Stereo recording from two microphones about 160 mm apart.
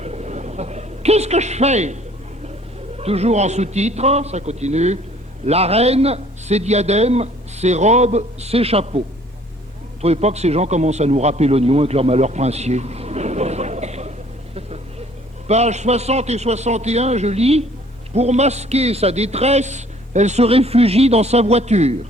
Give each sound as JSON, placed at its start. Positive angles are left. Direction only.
{"t": 0.0, "sound": "a sound", "side_deg": -45}
{"t": 3.0, "sound": "a man's voice", "side_deg": -40}
{"t": 15.4, "sound": "a man's voice", "side_deg": -45}